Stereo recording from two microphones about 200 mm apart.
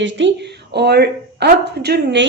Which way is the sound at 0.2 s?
65° right (ahead or behind).